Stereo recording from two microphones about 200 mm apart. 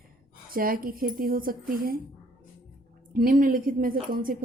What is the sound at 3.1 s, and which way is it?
A woman's voice, 45° right (ahead or behind).